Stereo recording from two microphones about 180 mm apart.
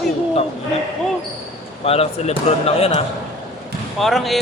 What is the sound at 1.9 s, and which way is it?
Speech, 35° left (ahead or behind).